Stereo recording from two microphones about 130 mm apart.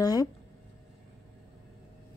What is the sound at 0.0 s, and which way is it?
Speech, 30° left (ahead or behind).